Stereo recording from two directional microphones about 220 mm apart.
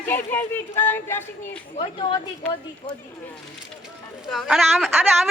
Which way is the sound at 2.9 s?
5° left (ahead or behind).